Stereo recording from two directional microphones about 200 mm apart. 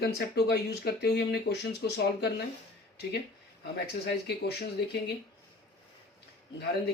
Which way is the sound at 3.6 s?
55° left (ahead or behind).